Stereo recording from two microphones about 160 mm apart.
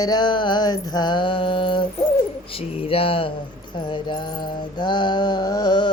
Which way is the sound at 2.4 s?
35° left (ahead or behind).